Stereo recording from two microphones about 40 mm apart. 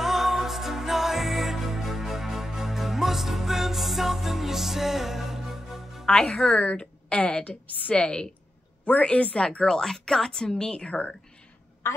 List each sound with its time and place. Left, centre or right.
0.0 s music: centre
6.2 s speech: centre
6.6 s a woman's voice: left
9.7 s speech: centre; by 11.1 s left